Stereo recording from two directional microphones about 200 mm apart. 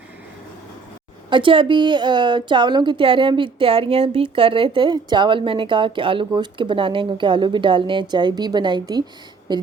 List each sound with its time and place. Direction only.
1.3 s a woman's voice: 25° right (ahead or behind)